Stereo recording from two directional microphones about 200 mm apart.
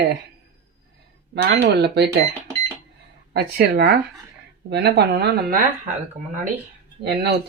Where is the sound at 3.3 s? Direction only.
50° right (ahead or behind).